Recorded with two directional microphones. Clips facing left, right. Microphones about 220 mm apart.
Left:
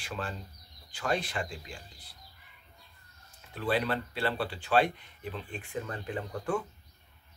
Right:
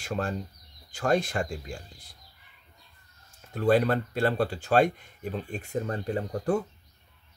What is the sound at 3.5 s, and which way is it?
Speech, 45° right (ahead or behind).